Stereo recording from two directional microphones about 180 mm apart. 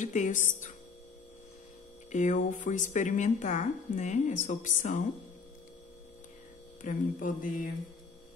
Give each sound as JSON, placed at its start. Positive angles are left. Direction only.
{"t": 0.0, "sound": "a woman's voice", "side_deg": 45}
{"t": 2.1, "sound": "a woman's voice", "side_deg": 45}
{"t": 6.8, "sound": "a woman's voice", "side_deg": 45}